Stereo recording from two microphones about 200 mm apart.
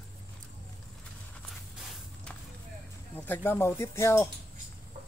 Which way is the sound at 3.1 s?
10° left (ahead or behind).